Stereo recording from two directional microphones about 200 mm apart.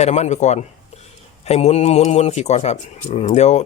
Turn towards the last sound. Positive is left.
turn(degrees=35)  # may be behind; listen again after turning